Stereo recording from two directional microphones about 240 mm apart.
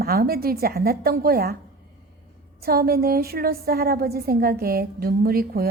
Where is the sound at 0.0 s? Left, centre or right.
Right.